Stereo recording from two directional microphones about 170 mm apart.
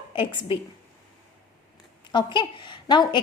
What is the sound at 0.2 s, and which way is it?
Speech, 30° left (ahead or behind).